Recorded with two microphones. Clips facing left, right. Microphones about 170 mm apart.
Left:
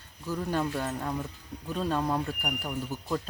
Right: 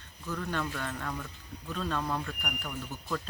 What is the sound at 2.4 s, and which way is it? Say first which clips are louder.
Speech: left 4 dB; 35° left (ahead or behind).